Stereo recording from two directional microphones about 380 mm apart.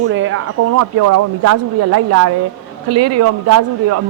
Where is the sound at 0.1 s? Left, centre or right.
Right.